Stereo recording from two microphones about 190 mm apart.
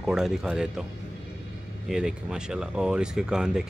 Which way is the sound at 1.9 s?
5° right (ahead or behind).